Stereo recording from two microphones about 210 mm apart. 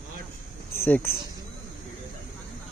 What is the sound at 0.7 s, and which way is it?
Speech, 10° left (ahead or behind).